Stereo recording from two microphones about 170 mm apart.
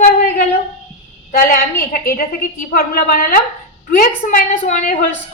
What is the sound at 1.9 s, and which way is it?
A woman's voice, 60° left (ahead or behind).